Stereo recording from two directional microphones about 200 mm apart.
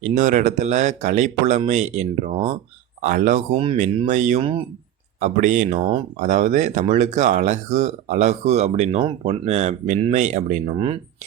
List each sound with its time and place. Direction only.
0.0 s speech: 35° right (ahead or behind)
3.5 s speech: 25° right (ahead or behind)
5.2 s speech: 40° right (ahead or behind)